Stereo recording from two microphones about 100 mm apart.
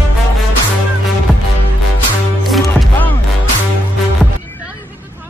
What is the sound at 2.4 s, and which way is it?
Music, centre (ahead or behind).